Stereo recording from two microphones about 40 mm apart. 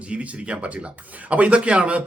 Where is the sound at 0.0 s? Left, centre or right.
Right.